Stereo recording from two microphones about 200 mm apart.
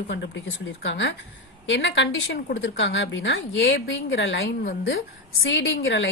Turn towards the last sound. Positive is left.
turn(degrees=55)  # may be behind; listen again after turning